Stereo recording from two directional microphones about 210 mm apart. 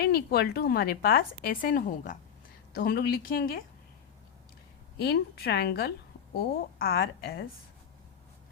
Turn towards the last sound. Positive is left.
turn(degrees=45)  # may be behind; listen again after turning